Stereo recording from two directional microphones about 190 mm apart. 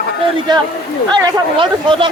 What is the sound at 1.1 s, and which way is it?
Speech, 20° right (ahead or behind).